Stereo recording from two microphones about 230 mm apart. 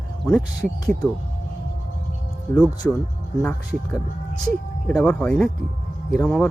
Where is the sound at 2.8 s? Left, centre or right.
Centre.